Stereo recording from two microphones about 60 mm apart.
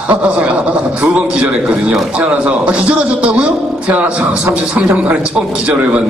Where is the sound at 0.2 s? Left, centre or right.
Centre.